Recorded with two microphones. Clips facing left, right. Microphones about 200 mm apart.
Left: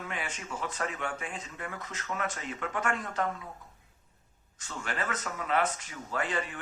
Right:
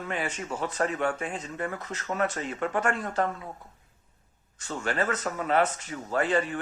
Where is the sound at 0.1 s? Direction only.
35° right (ahead or behind).